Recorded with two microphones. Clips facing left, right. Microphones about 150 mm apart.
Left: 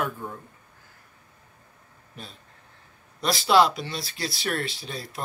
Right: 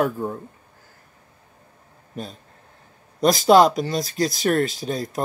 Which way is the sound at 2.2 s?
45° right (ahead or behind).